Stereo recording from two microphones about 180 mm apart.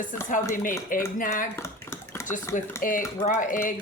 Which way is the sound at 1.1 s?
50° left (ahead or behind).